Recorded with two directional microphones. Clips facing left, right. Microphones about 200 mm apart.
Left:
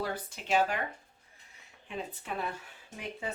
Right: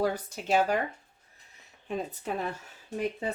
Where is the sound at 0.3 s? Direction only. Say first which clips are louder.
Right 3 dB; 40° right (ahead or behind).